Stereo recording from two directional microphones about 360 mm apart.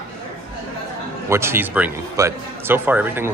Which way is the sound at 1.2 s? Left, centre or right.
Centre.